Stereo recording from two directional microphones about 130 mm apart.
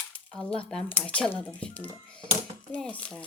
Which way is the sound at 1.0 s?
10° left (ahead or behind).